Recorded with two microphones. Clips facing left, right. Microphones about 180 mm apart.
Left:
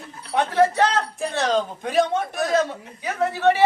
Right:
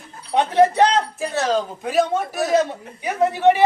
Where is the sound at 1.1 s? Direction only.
5° right (ahead or behind).